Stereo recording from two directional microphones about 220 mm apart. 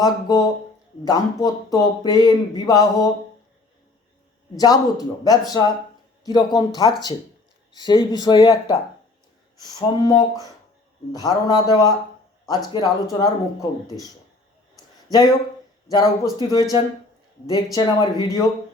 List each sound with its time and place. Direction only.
0.0 s speech: 15° left (ahead or behind)
4.5 s speech: 15° left (ahead or behind)
11.4 s speech: 15° left (ahead or behind)
15.9 s speech: 15° left (ahead or behind)